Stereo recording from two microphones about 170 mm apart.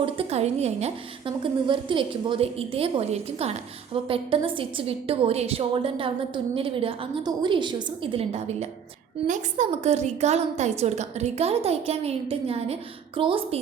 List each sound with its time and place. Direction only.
0.0 s a woman's voice: 35° right (ahead or behind)